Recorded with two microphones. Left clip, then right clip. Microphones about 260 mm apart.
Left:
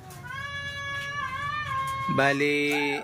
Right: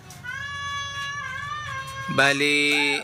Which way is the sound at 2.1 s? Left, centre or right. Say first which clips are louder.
Right 5 dB; centre.